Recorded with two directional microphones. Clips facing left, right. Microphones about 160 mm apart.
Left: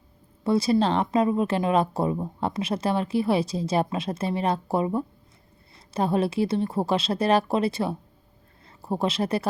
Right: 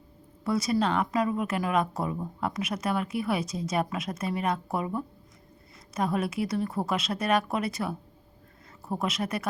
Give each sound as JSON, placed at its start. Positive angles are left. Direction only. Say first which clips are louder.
{"t": 0.4, "sound": "speech", "louder": "left 5 dB", "side_deg": 30}